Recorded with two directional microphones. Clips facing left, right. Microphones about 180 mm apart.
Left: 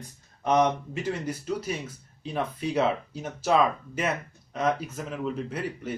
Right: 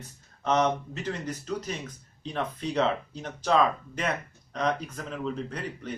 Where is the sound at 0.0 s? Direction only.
15° left (ahead or behind).